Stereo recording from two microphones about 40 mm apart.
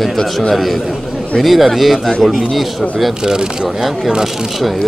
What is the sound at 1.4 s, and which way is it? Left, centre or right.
Speech, centre.